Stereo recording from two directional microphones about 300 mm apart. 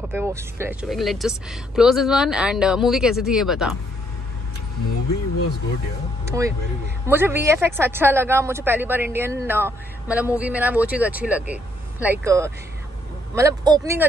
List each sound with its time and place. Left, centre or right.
0.1 s speech: centre
6.3 s speech: centre